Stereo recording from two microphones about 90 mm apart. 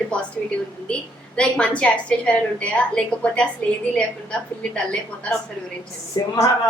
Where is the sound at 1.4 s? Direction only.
10° left (ahead or behind).